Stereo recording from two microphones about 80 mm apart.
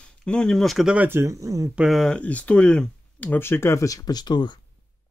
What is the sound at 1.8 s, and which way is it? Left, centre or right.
Speech, centre.